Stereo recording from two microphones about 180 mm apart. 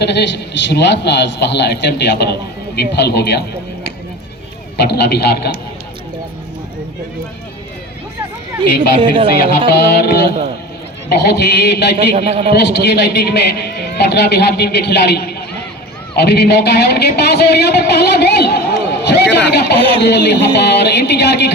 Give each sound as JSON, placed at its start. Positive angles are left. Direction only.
{"t": 0.0, "sound": "a man's voice", "side_deg": 65}
{"t": 4.8, "sound": "a man's voice", "side_deg": 65}
{"t": 9.0, "sound": "a woman's voice", "side_deg": -30}
{"t": 9.6, "sound": "a man's voice", "side_deg": 65}
{"t": 12.1, "sound": "a man's voice", "side_deg": -35}
{"t": 12.5, "sound": "a man's voice", "side_deg": 70}